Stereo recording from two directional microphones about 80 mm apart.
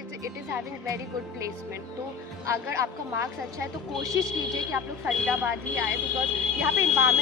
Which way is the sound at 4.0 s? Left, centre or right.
Right.